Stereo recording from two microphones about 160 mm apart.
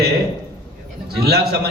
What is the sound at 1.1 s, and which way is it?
Speech, 80° right.